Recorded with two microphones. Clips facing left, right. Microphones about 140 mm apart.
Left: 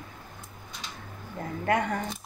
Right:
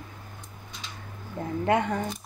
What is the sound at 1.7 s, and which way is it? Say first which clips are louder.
Speech: right 2 dB; 25° right (ahead or behind).